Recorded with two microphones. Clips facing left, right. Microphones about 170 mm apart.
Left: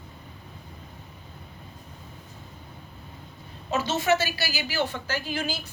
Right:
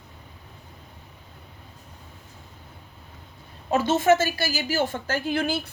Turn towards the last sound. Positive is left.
turn(degrees=-60)  # may be behind; listen again after turning